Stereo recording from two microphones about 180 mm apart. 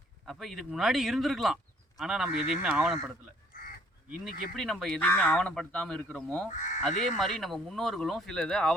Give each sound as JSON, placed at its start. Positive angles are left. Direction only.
{"t": 0.3, "sound": "speech", "side_deg": 0}
{"t": 4.2, "sound": "speech", "side_deg": 0}
{"t": 6.6, "sound": "speech", "side_deg": 45}
{"t": 7.2, "sound": "speech", "side_deg": 0}